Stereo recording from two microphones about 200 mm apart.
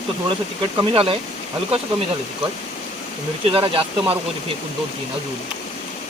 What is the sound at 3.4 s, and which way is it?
Speech, 25° right (ahead or behind).